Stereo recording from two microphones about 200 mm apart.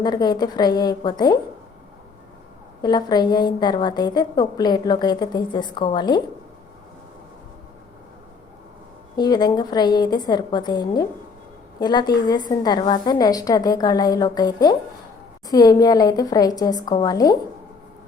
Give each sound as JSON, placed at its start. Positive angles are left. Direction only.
{"t": 0.0, "sound": "a woman's voice", "side_deg": 20}
{"t": 2.8, "sound": "a woman's voice", "side_deg": 20}
{"t": 9.1, "sound": "a woman's voice", "side_deg": 20}